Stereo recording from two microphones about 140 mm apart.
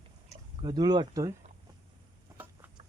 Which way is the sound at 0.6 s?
30° right (ahead or behind).